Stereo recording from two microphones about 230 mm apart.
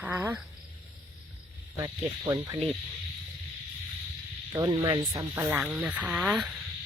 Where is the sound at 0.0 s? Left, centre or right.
Centre.